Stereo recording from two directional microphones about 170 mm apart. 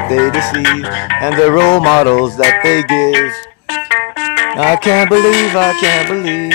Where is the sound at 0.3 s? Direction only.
40° left (ahead or behind).